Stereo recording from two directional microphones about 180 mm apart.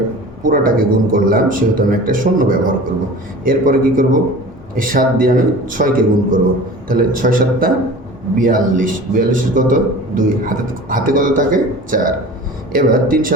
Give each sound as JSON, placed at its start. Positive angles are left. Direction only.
{"t": 0.4, "sound": "a man's voice", "side_deg": -50}